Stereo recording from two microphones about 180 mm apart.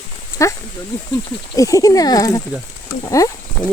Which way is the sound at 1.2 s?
20° left (ahead or behind).